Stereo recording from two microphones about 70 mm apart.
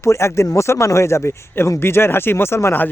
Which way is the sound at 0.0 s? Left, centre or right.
Left.